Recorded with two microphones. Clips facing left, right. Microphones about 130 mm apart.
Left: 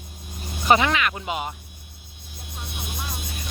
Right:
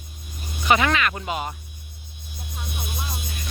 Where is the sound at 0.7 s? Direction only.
15° left (ahead or behind).